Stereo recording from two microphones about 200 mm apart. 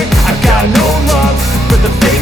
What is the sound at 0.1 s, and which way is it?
Music, centre (ahead or behind).